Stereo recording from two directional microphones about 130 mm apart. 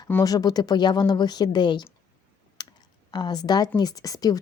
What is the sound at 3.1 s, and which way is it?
Speech, 35° left (ahead or behind).